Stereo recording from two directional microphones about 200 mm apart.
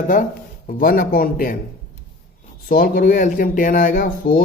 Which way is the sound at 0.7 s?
45° left (ahead or behind).